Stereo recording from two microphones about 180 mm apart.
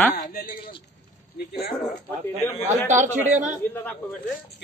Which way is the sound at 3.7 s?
15° left (ahead or behind).